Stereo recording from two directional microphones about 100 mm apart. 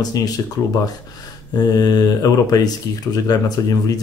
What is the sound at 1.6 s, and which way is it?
Speech, 40° left (ahead or behind).